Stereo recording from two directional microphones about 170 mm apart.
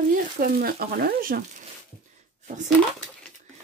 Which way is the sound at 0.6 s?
60° right (ahead or behind).